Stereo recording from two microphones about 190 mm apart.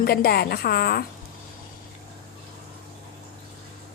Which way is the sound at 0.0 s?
55° left (ahead or behind).